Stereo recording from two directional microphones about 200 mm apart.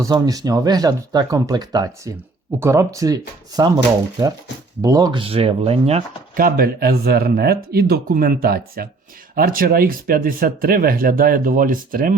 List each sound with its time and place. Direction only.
0.0 s speech: 20° right (ahead or behind)
4.8 s speech: 20° right (ahead or behind)
6.3 s speech: 45° right (ahead or behind)